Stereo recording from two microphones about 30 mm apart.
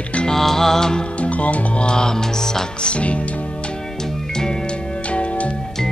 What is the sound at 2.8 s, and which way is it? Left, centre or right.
Speech, left.